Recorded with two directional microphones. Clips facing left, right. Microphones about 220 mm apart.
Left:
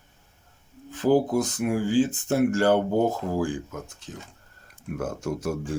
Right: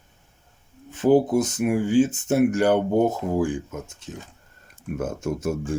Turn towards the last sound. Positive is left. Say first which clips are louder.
# right 3 dB
turn(degrees=-25)  # may be behind; listen again after turning